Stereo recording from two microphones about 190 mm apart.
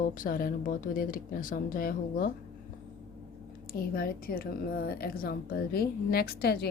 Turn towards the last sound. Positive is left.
turn(degrees=55)  # may be behind; listen again after turning